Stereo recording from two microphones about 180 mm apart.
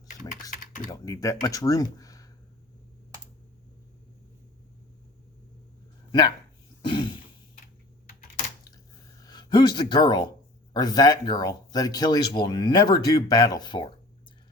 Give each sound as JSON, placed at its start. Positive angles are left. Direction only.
{"t": 0.9, "sound": "speech", "side_deg": 20}
{"t": 6.1, "sound": "speech", "side_deg": 25}
{"t": 6.8, "sound": "throat clearing", "side_deg": 25}
{"t": 9.2, "sound": "speech", "side_deg": 25}